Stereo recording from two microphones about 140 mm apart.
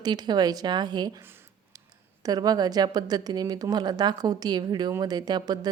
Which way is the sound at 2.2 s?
25° right (ahead or behind).